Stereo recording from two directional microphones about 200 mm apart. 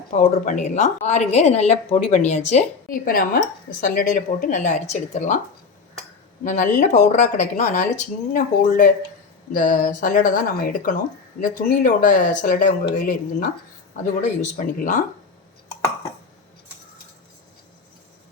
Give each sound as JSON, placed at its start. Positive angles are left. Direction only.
{"t": 0.1, "sound": "a woman's voice", "side_deg": 40}
{"t": 6.4, "sound": "a woman's voice", "side_deg": 40}